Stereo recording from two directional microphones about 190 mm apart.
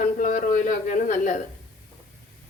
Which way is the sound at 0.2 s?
45° left (ahead or behind).